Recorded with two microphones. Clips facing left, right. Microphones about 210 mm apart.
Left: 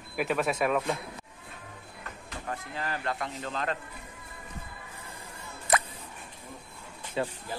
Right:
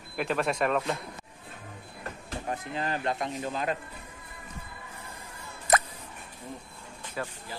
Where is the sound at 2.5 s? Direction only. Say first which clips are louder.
Right 3 dB; 20° right (ahead or behind).